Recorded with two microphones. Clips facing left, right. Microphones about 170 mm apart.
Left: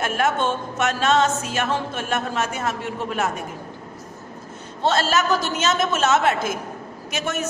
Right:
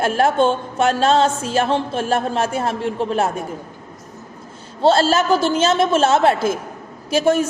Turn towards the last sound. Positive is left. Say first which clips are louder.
# right 10 dB
turn(degrees=-30)  # may be behind; listen again after turning